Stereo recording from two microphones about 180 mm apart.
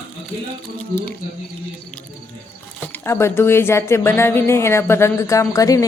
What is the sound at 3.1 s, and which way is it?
Speech, 15° left (ahead or behind).